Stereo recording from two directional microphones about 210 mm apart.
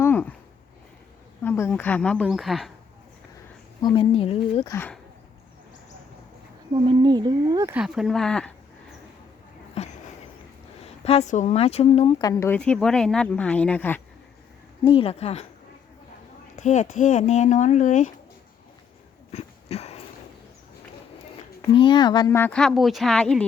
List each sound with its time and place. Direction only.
0.0 s a sound: 10° left (ahead or behind)
1.4 s speech: 10° left (ahead or behind)
3.8 s speech: 25° left (ahead or behind)
4.7 s speech: 10° left (ahead or behind)
6.8 s speech: 20° right (ahead or behind)
7.8 s speech: centre (ahead or behind)
9.8 s a sound: 30° left (ahead or behind)
11.0 s speech: 30° left (ahead or behind); by 14.0 s 10° left (ahead or behind)
14.8 s speech: 25° left (ahead or behind)
16.6 s speech: 35° left (ahead or behind)
19.3 s a sound: 30° left (ahead or behind)
21.8 s speech: 20° left (ahead or behind); by 23.4 s centre (ahead or behind)